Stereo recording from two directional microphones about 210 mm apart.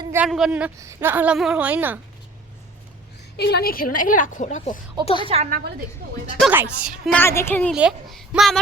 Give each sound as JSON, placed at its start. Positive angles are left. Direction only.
{"t": 0.0, "sound": "a sound", "side_deg": -10}
{"t": 0.3, "sound": "speech", "side_deg": 0}
{"t": 3.3, "sound": "a woman's voice", "side_deg": 50}
{"t": 5.0, "sound": "a woman's voice", "side_deg": 25}
{"t": 5.3, "sound": "a woman's voice", "side_deg": -35}
{"t": 6.4, "sound": "speech", "side_deg": -5}
{"t": 7.2, "sound": "a woman's voice", "side_deg": 10}
{"t": 7.7, "sound": "speech", "side_deg": 0}